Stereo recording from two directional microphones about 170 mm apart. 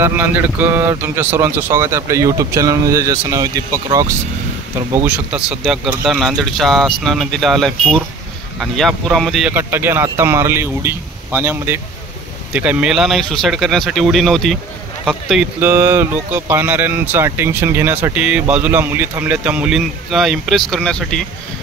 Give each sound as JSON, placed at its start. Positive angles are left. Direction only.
{"t": 0.0, "sound": "speech", "side_deg": -10}
{"t": 9.5, "sound": "speech", "side_deg": -10}
{"t": 15.7, "sound": "speech", "side_deg": -15}